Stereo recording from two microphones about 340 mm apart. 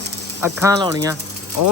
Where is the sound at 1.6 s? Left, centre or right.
Left.